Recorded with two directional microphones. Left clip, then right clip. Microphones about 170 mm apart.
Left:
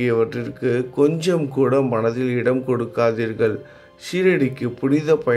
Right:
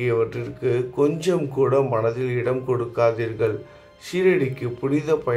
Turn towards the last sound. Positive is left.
turn(degrees=25)  # may be behind; listen again after turning